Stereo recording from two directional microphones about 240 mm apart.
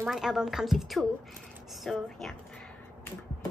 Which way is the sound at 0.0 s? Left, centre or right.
Centre.